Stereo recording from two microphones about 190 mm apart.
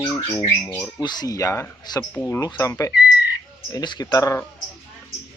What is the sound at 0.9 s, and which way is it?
Speech, 20° left (ahead or behind).